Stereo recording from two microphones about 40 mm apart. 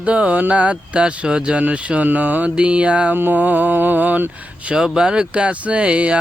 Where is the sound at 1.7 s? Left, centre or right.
Right.